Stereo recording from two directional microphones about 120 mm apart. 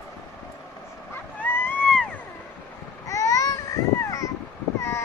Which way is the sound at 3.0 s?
25° left (ahead or behind).